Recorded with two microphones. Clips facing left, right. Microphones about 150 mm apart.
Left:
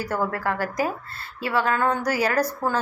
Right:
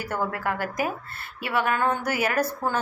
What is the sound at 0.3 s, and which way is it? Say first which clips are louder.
A woman's voice: left 2 dB; 20° right (ahead or behind).